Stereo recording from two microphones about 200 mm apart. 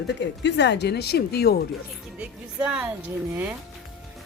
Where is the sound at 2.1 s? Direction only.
5° right (ahead or behind).